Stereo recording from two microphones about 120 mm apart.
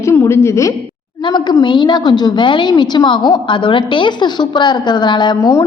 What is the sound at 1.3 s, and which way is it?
A woman's voice, 35° left (ahead or behind).